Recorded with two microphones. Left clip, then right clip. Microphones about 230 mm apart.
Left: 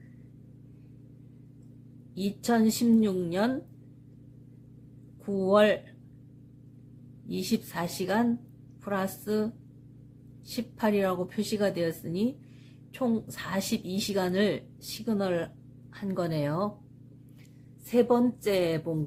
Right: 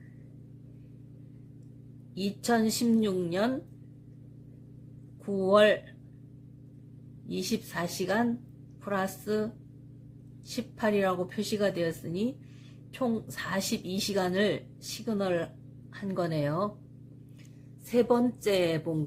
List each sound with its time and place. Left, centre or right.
2.1 s a woman's voice: centre
5.2 s a woman's voice: centre
7.3 s a woman's voice: centre
10.5 s a woman's voice: centre
17.8 s a woman's voice: centre